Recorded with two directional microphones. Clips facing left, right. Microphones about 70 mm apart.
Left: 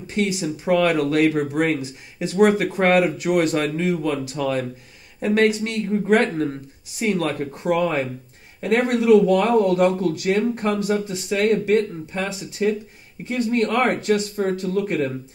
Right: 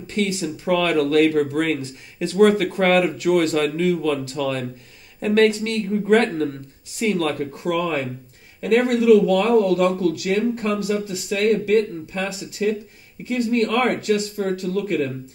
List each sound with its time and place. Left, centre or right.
0.0 s speech: centre